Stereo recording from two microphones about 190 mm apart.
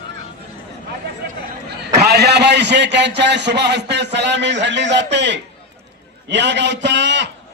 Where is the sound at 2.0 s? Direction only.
60° right (ahead or behind).